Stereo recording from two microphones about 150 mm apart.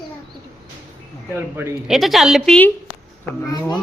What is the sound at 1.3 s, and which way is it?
Speech, 15° right (ahead or behind).